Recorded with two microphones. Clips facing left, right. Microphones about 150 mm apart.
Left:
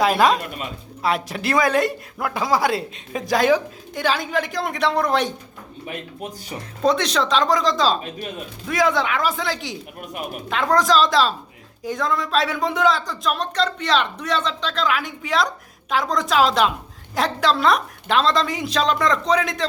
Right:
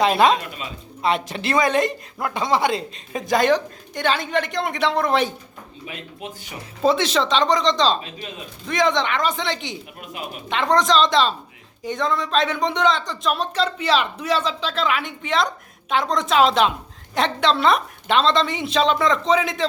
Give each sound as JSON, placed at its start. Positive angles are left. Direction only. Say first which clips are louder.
{"t": 0.0, "sound": "speech", "louder": "even", "side_deg": 0}
{"t": 5.8, "sound": "speech", "louder": "left 4 dB", "side_deg": 50}
{"t": 6.8, "sound": "speech", "louder": "right 1 dB", "side_deg": 0}
{"t": 10.0, "sound": "speech", "louder": "left 4 dB", "side_deg": 50}
{"t": 10.5, "sound": "speech", "louder": "even", "side_deg": 0}